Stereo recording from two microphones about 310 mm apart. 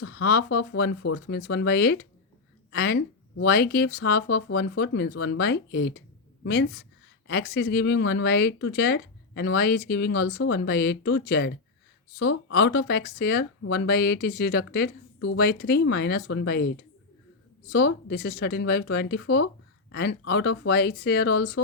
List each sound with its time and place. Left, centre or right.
0.0 s speech: left
17.7 s speech: left